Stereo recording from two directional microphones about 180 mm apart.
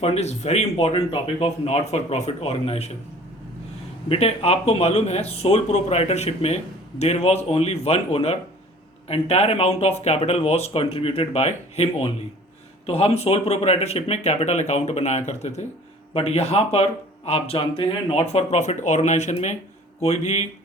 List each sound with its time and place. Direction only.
0.0 s speech: 35° left (ahead or behind)
4.1 s speech: 35° left (ahead or behind)